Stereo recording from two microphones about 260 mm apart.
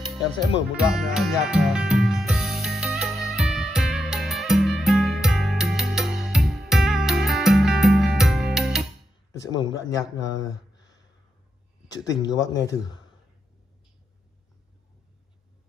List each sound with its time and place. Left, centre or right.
0.8 s music: centre
9.5 s speech: centre
11.9 s speech: centre